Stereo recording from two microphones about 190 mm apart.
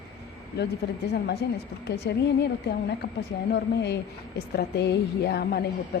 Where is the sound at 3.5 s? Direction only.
65° left (ahead or behind).